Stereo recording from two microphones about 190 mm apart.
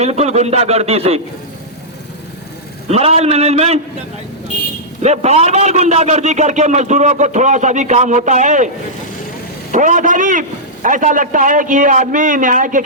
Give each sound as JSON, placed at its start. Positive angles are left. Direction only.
{"t": 0.0, "sound": "a man's voice", "side_deg": -35}
{"t": 2.8, "sound": "a man's voice", "side_deg": -35}
{"t": 5.0, "sound": "a man's voice", "side_deg": -35}
{"t": 9.7, "sound": "a man's voice", "side_deg": -40}